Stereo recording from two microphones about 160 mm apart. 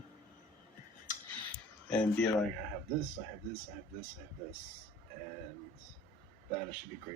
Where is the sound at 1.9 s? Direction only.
5° left (ahead or behind).